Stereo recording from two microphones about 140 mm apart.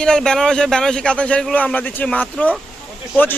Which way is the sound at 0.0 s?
5° left (ahead or behind).